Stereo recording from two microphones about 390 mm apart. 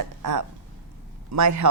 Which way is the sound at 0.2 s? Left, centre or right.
Right.